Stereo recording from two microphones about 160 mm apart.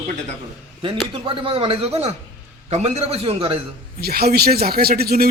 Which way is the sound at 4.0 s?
75° right (ahead or behind).